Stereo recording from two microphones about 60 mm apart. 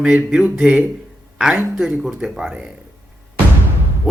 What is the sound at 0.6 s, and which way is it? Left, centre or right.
Speech, centre.